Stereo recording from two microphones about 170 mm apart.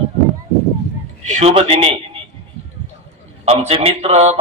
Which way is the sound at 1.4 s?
35° right (ahead or behind).